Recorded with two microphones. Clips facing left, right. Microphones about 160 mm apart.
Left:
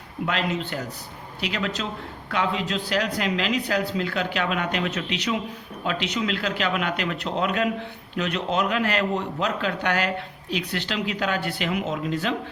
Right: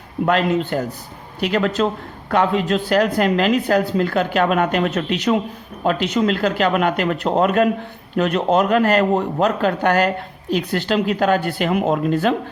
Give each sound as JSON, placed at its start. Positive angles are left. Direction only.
{"t": 0.3, "sound": "a man's voice", "side_deg": -50}